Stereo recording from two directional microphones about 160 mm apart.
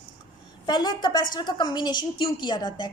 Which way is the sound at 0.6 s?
25° left (ahead or behind).